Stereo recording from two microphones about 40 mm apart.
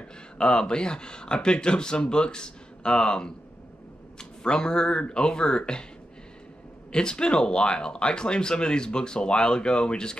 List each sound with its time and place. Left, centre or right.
0.4 s speech: left
6.9 s speech: left